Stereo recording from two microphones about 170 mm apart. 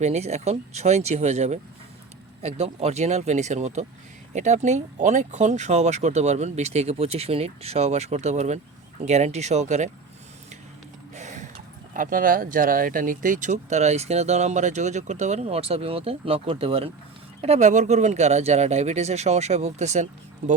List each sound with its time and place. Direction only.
0.0 s speech: 40° right (ahead or behind)
11.1 s a sound: 45° right (ahead or behind)
11.9 s speech: 55° right (ahead or behind)